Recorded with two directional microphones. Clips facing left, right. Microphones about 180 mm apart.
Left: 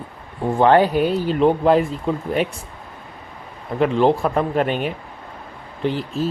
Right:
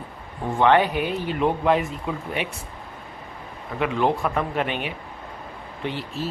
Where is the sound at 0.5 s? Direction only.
35° left (ahead or behind).